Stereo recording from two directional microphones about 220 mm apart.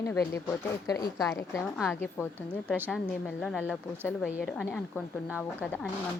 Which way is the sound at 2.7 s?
10° right (ahead or behind).